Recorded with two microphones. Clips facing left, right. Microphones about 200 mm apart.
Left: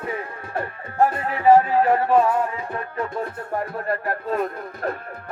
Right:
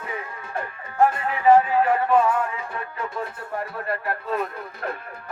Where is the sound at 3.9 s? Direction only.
45° left (ahead or behind).